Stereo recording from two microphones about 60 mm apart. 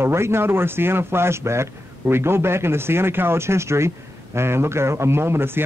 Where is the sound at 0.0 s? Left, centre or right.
Right.